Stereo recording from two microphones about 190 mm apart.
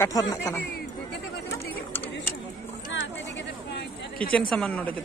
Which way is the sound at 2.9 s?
75° left (ahead or behind).